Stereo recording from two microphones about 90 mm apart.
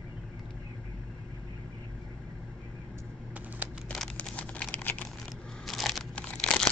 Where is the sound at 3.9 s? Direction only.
5° left (ahead or behind).